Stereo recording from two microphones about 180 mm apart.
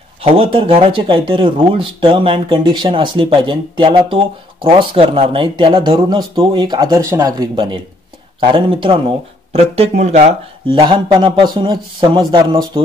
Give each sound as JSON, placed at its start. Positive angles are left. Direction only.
{"t": 0.2, "sound": "speech", "side_deg": -30}
{"t": 10.7, "sound": "speech", "side_deg": -25}